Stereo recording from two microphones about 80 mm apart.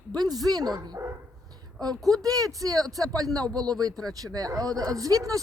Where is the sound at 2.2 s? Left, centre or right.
Right.